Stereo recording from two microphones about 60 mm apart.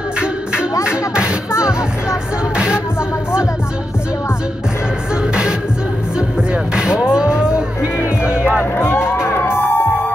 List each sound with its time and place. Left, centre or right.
0.8 s music: centre
6.7 s music: centre
7.8 s music: left
8.3 s music: centre
8.7 s music: left